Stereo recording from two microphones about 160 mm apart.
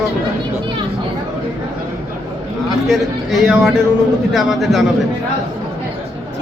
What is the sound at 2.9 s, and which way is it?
Speech, 5° right (ahead or behind).